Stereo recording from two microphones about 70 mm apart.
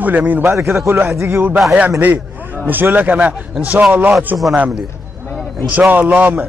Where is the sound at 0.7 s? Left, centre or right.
Right.